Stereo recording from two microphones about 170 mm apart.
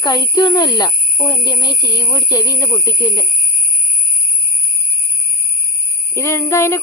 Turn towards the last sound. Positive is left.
turn(degrees=15)  # may be behind; listen again after turning